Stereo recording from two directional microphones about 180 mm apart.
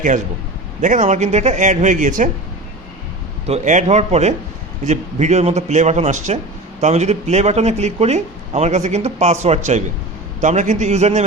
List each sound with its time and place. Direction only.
0.8 s speech: 45° right (ahead or behind)
3.4 s speech: 40° right (ahead or behind)